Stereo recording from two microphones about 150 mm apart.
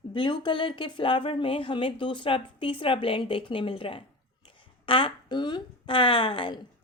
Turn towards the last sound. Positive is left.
turn(degrees=30)  # may be behind; listen again after turning